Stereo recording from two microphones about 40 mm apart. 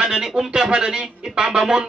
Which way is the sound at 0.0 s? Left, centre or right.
Centre.